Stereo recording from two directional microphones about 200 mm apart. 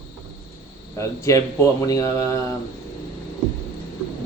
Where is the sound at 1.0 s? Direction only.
15° left (ahead or behind).